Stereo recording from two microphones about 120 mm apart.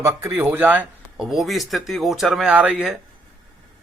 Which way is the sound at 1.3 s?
Centre (ahead or behind).